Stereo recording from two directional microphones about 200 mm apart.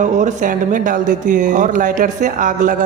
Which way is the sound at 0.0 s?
40° right (ahead or behind).